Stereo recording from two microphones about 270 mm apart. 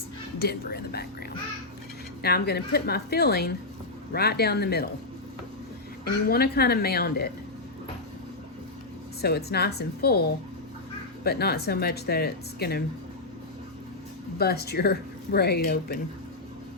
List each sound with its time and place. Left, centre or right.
0.3 s speech: left
2.2 s speech: left
6.1 s speech: left
9.2 s speech: left
14.3 s speech: left